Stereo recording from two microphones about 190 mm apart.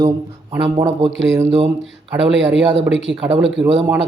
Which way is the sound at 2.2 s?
70° right (ahead or behind).